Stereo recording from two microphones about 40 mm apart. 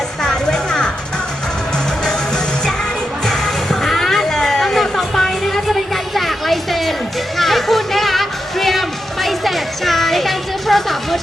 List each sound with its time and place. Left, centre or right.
0.2 s music: centre
3.2 s music: centre